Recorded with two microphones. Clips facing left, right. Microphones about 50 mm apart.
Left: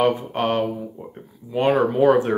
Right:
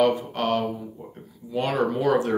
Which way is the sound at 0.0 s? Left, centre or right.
Left.